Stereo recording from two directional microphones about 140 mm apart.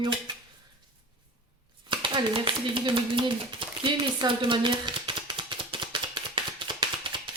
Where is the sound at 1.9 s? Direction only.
35° right (ahead or behind).